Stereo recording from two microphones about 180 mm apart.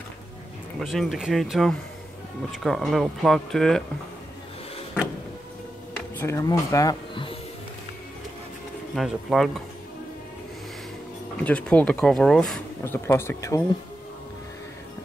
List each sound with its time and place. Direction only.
0.7 s speech: centre (ahead or behind)
6.1 s speech: 15° left (ahead or behind)
8.9 s speech: centre (ahead or behind)
11.4 s speech: 5° left (ahead or behind)